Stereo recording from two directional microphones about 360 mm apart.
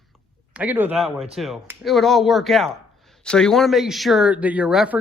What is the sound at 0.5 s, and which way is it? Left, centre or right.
A man's voice, centre.